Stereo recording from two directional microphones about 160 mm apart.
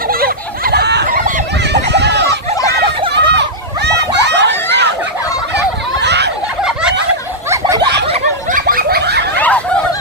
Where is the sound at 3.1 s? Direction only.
90° right.